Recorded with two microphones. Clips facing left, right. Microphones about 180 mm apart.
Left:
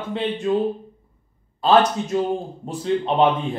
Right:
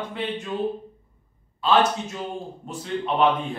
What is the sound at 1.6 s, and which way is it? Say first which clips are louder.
Speech: left 4 dB; 40° left (ahead or behind).